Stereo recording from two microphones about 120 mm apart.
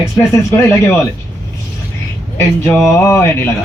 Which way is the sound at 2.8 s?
20° left (ahead or behind).